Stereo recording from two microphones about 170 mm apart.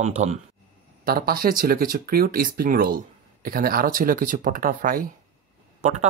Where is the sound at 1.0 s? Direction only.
60° right (ahead or behind).